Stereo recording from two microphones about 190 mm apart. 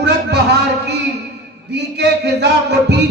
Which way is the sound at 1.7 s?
65° right (ahead or behind).